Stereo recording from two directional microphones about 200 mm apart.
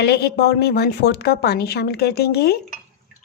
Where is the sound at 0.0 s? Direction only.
55° left (ahead or behind).